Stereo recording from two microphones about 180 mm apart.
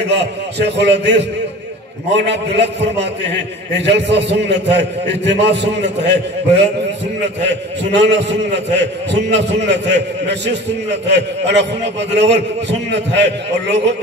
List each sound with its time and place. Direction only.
0.0 s a man's voice: 70° right (ahead or behind)
7.4 s a man's voice: 75° right (ahead or behind)